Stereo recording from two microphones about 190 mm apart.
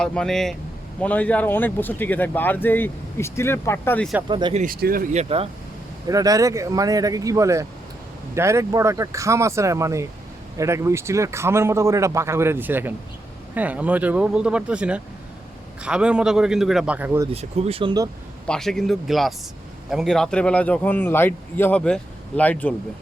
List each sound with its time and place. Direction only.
0.0 s a man's voice: 5° left (ahead or behind)
4.3 s speech: 25° right (ahead or behind)
4.5 s speech: 45° right (ahead or behind)
5.2 s speech: 30° right (ahead or behind)
6.1 s a man's voice: 20° right (ahead or behind)
17.3 s speech: 30° right (ahead or behind)
18.4 s a man's voice: 5° left (ahead or behind)